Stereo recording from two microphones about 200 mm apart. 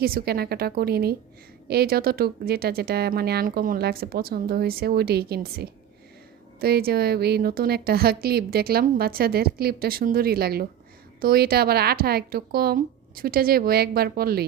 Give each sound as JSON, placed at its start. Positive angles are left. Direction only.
{"t": 0.0, "sound": "a woman's voice", "side_deg": -50}